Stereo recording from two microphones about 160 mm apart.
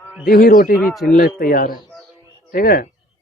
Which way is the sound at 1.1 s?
65° left (ahead or behind).